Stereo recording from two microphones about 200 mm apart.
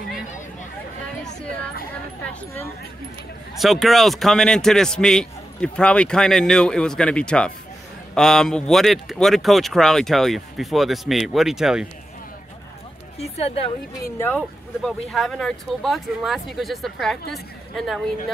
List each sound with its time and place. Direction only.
3.5 s a man's voice: centre (ahead or behind)
13.2 s speech: 30° left (ahead or behind)
14.0 s speech: 10° left (ahead or behind)
14.9 s a man's voice: centre (ahead or behind)